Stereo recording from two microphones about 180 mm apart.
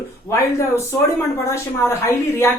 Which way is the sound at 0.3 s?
15° left (ahead or behind).